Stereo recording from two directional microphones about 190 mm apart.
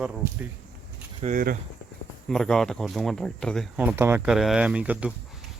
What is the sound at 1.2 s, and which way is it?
Speech, 45° right (ahead or behind).